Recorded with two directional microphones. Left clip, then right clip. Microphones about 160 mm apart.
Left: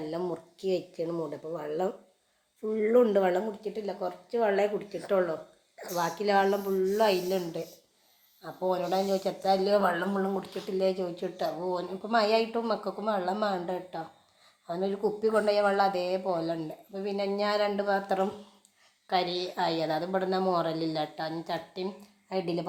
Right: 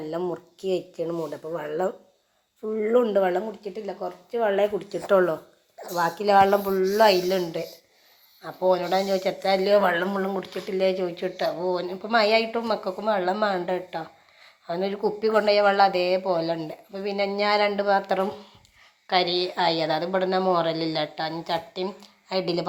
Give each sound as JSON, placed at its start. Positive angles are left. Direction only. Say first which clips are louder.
{"t": 0.1, "sound": "speech", "louder": "right 4 dB", "side_deg": -10}
{"t": 5.0, "sound": "speech", "louder": "right 8 dB", "side_deg": -40}
{"t": 5.8, "sound": "speech", "louder": "right 6 dB", "side_deg": 5}
{"t": 6.1, "sound": "speech", "louder": "right 8 dB", "side_deg": -15}